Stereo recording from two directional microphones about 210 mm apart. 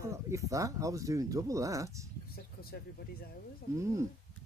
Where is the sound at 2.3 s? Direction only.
45° left (ahead or behind).